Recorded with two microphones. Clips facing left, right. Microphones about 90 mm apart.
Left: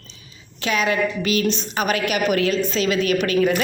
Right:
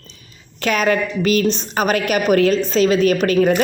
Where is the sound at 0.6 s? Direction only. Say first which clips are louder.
Right 3 dB; 45° right (ahead or behind).